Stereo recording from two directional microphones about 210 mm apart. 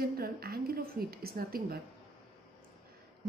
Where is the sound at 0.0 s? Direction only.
45° right (ahead or behind).